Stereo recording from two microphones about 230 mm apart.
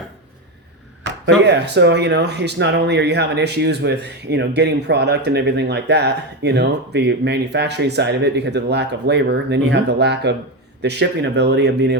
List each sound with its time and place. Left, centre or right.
1.5 s speech: right